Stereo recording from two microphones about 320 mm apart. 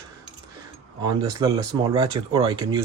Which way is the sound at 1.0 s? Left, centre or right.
Centre.